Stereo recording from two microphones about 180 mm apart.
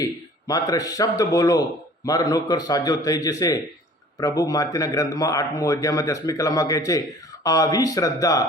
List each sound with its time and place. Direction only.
0.0 s a man's voice: 20° left (ahead or behind)